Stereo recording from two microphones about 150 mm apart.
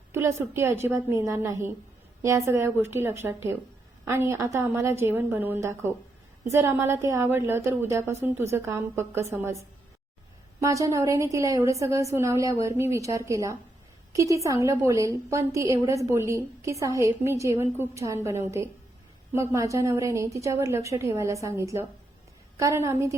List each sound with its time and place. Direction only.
0.1 s a woman's voice: 15° right (ahead or behind)
10.6 s a woman's voice: 20° right (ahead or behind)